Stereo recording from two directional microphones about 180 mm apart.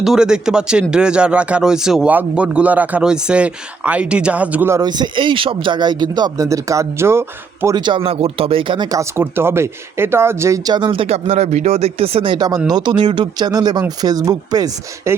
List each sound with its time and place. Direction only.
0.0 s speech: 5° right (ahead or behind)
7.8 s speech: 25° right (ahead or behind)